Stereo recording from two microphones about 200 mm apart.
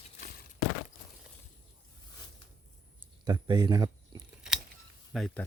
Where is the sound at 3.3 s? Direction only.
20° right (ahead or behind).